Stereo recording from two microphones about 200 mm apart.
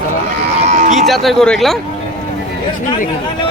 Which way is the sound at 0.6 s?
40° right (ahead or behind).